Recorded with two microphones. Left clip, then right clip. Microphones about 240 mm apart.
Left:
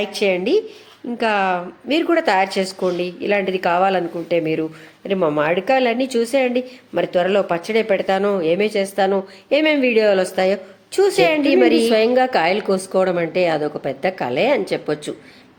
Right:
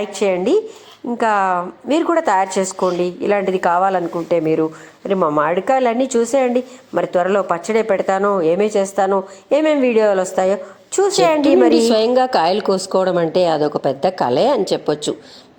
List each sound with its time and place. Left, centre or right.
0.0 s a woman's voice: centre
11.9 s speech: right